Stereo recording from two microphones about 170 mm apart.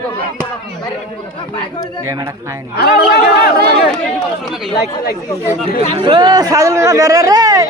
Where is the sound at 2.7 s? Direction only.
70° left (ahead or behind).